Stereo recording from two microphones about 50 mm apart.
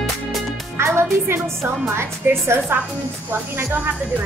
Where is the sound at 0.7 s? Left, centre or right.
Right.